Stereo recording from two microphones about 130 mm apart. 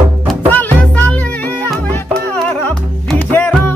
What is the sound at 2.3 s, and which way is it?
Music, 10° left (ahead or behind).